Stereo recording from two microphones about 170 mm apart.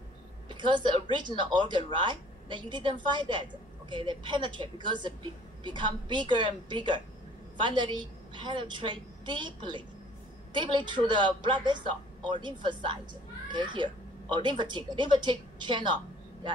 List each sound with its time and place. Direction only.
0.5 s a woman's voice: 25° right (ahead or behind)